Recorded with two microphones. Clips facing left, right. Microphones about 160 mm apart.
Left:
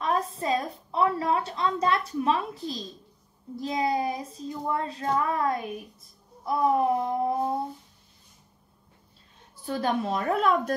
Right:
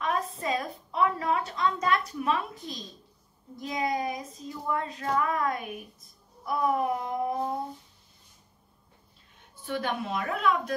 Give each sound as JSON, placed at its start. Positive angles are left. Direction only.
{"t": 0.0, "sound": "a woman's voice", "side_deg": 35}
{"t": 6.4, "sound": "a sound", "side_deg": 30}
{"t": 9.7, "sound": "a woman's voice", "side_deg": 35}